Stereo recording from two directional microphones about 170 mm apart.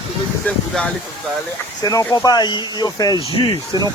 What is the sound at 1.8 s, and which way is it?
Speech, 20° left (ahead or behind).